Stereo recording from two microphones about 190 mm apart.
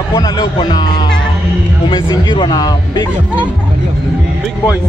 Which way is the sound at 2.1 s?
25° left (ahead or behind).